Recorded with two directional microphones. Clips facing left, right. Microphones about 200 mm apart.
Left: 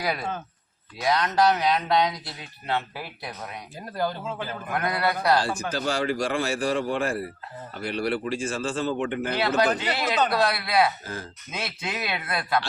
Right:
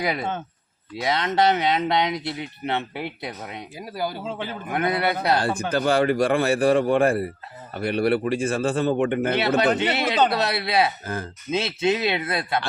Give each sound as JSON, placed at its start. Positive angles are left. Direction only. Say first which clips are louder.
{"t": 0.0, "sound": "speech", "louder": "right 3 dB", "side_deg": -20}
{"t": 3.8, "sound": "speech", "louder": "left 1 dB", "side_deg": -10}
{"t": 4.3, "sound": "speech", "louder": "right 2 dB", "side_deg": -25}
{"t": 5.4, "sound": "a man's voice", "louder": "right 4 dB", "side_deg": -55}
{"t": 9.6, "sound": "speech", "louder": "right 3 dB", "side_deg": -25}
{"t": 11.0, "sound": "a man's voice", "louder": "right 5 dB", "side_deg": -55}
{"t": 11.5, "sound": "speech", "louder": "right 10 dB", "side_deg": -25}